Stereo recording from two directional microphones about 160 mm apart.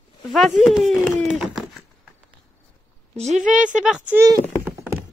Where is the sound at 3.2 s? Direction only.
45° right (ahead or behind).